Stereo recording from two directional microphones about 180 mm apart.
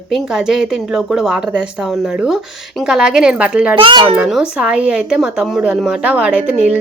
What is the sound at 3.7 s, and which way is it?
Speech, 30° right (ahead or behind).